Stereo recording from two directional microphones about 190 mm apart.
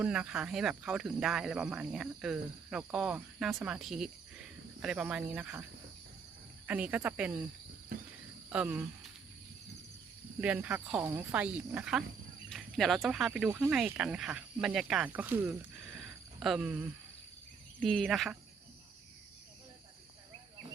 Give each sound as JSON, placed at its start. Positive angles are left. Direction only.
{"t": 0.0, "sound": "speech", "side_deg": -5}
{"t": 6.7, "sound": "speech", "side_deg": -5}
{"t": 7.9, "sound": "speech", "side_deg": -45}
{"t": 8.4, "sound": "speech", "side_deg": -5}
{"t": 10.4, "sound": "speech", "side_deg": -5}
{"t": 17.8, "sound": "speech", "side_deg": 5}